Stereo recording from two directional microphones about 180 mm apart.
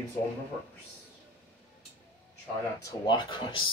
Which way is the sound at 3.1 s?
25° left (ahead or behind).